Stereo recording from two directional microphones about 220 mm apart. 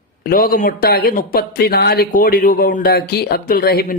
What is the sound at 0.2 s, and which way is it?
Speech, 40° left (ahead or behind).